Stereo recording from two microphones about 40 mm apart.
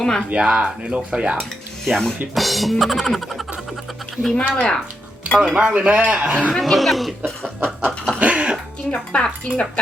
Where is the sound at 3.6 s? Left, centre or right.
Centre.